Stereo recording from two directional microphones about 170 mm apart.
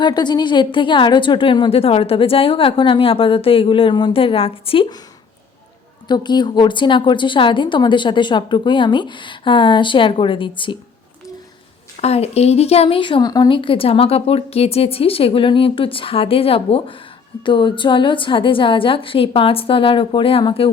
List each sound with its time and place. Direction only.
0.0 s a woman's voice: 25° left (ahead or behind)
6.1 s a woman's voice: 25° left (ahead or behind)
11.9 s a woman's voice: 40° left (ahead or behind)